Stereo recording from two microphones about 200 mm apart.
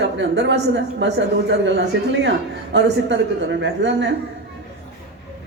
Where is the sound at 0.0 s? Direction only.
65° right (ahead or behind).